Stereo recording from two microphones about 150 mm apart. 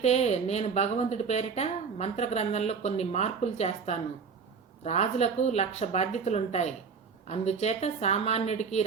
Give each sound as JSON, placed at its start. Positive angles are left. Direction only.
{"t": 0.0, "sound": "a woman's voice", "side_deg": 45}